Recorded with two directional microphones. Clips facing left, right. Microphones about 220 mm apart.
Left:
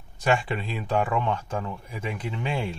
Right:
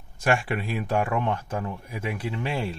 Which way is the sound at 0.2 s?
10° right (ahead or behind).